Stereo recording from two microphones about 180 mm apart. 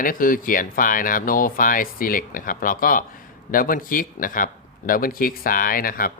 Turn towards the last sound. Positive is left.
turn(degrees=55)  # may be behind; listen again after turning